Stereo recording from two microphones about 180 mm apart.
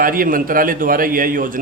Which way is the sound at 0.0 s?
50° right (ahead or behind).